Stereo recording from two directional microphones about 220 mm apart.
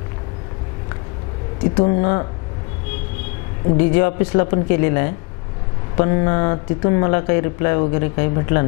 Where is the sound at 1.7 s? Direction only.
30° left (ahead or behind).